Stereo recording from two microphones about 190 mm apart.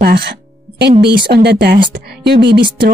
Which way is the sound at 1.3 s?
60° right (ahead or behind).